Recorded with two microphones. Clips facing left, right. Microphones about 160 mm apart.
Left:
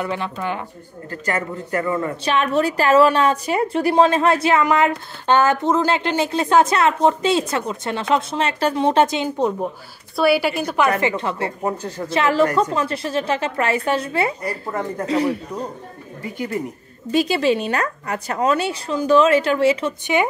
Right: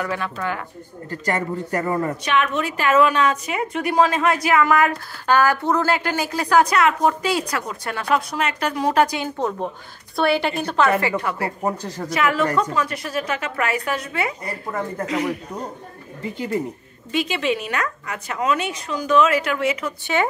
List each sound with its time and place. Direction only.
0.0 s a woman's voice: 20° left (ahead or behind)
1.2 s speech: 35° right (ahead or behind)
2.2 s a woman's voice: 35° left (ahead or behind)
10.1 s a woman's voice: 5° left (ahead or behind)
11.0 s a woman's voice: 25° left (ahead or behind)
17.1 s a woman's voice: 40° left (ahead or behind)
20.1 s a woman's voice: 15° left (ahead or behind)